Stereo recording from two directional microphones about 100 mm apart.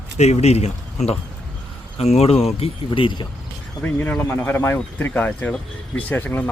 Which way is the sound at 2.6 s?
60° left (ahead or behind).